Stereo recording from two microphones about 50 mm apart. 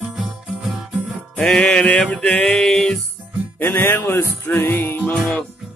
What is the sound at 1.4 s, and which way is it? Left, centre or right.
Music, centre.